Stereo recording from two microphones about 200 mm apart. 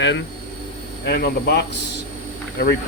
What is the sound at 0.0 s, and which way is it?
Speech, 65° left (ahead or behind).